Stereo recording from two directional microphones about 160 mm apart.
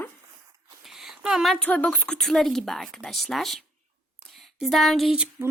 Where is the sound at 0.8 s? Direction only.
Centre (ahead or behind).